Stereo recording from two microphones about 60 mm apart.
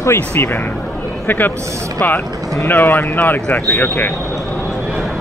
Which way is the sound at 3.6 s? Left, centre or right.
Left.